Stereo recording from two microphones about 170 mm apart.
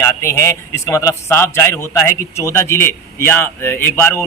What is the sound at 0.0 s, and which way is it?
A man's voice, 15° left (ahead or behind).